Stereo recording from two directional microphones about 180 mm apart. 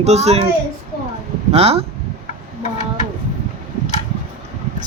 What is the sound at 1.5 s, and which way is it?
Speech, 35° right (ahead or behind).